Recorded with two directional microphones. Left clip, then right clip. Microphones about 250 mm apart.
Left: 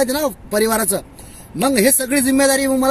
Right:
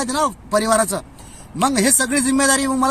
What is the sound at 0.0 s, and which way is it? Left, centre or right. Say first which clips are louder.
Speech: left 2 dB; right.